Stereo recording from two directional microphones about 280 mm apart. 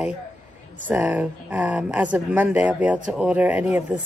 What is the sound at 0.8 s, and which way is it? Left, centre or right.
Speech, centre.